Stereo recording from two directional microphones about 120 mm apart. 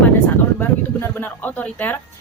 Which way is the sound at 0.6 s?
15° left (ahead or behind).